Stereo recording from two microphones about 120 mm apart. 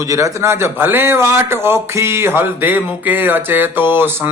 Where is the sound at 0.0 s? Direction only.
25° right (ahead or behind).